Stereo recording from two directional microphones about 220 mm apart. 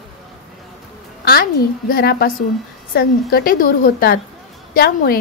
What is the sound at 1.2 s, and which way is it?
A woman's voice, 45° left (ahead or behind).